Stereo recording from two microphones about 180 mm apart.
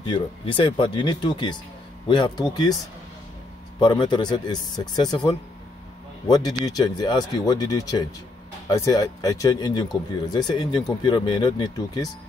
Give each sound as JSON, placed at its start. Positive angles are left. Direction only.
{"t": 0.0, "sound": "speech", "side_deg": 25}
{"t": 3.8, "sound": "speech", "side_deg": 25}